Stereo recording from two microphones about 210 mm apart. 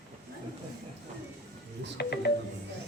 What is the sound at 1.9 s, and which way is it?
Speech, 50° left (ahead or behind).